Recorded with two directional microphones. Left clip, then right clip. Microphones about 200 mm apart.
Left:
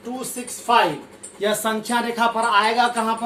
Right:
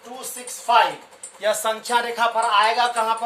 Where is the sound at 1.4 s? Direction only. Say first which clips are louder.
Even; 25° right (ahead or behind).